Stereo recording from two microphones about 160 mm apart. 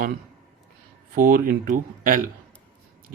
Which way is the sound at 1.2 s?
60° right (ahead or behind).